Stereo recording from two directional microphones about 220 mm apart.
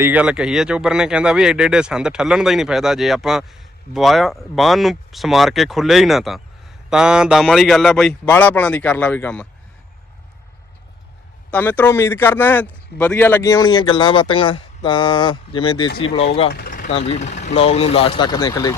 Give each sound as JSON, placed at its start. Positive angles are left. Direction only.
{"t": 0.0, "sound": "speech", "side_deg": -5}
{"t": 11.5, "sound": "speech", "side_deg": 10}
{"t": 16.5, "sound": "vehicle", "side_deg": 40}
{"t": 16.9, "sound": "speech", "side_deg": 30}